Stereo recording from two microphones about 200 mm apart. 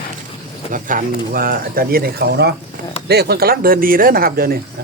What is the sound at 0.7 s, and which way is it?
Speech, 40° right (ahead or behind).